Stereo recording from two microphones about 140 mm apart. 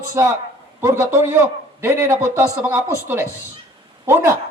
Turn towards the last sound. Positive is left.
turn(degrees=-15)  # may be behind; listen again after turning